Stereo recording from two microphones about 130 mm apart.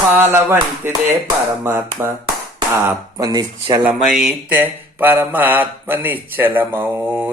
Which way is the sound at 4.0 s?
Centre (ahead or behind).